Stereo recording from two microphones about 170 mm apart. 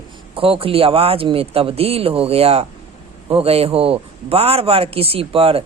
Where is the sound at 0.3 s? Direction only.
30° right (ahead or behind).